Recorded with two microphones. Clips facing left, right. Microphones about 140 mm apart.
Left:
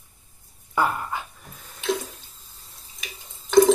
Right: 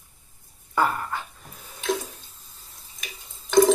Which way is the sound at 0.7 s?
15° left (ahead or behind).